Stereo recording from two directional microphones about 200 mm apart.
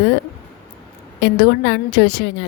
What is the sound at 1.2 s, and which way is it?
A woman's voice, 55° left (ahead or behind).